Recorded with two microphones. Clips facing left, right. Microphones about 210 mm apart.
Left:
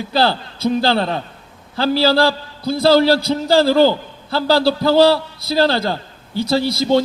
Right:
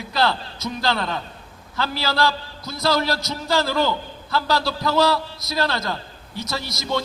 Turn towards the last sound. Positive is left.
turn(degrees=30)  # may be behind; listen again after turning